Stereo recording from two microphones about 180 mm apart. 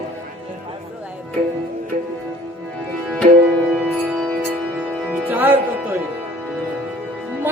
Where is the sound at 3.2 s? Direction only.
35° right (ahead or behind).